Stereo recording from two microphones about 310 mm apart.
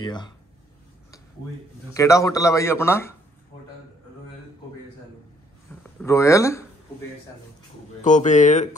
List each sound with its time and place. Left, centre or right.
0.0 s speech: centre
2.0 s speech: centre
5.9 s speech: centre
8.0 s speech: left